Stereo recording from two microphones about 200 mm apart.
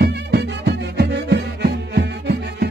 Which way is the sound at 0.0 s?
55° right (ahead or behind).